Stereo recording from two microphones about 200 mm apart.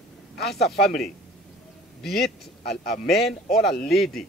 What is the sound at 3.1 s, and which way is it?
Speech, centre (ahead or behind).